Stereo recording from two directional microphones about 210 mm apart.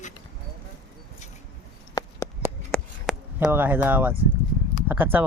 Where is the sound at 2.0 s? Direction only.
15° left (ahead or behind).